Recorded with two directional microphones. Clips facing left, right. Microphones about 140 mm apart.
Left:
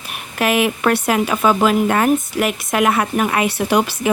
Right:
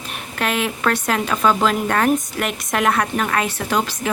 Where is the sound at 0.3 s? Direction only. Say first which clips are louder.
Left 5 dB; 10° left (ahead or behind).